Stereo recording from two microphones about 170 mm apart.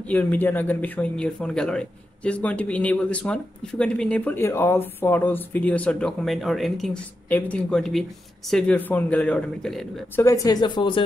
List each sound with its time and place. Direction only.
0.0 s speech: 10° left (ahead or behind)
10.1 s speech: 20° left (ahead or behind)